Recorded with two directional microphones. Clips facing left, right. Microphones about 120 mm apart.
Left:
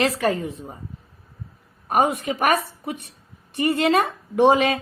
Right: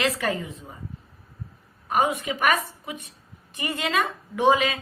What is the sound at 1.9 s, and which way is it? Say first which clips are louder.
A woman's voice: left 3 dB; 50° left (ahead or behind).